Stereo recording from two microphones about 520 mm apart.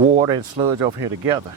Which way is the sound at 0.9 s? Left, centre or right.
Right.